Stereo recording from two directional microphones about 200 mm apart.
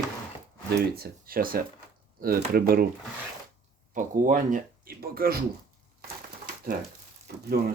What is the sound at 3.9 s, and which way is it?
Speech, 40° right (ahead or behind).